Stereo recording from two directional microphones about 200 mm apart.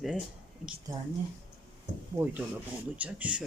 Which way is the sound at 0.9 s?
15° right (ahead or behind).